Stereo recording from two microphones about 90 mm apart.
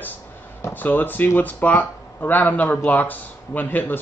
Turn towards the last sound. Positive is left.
turn(degrees=20)  # may be behind; listen again after turning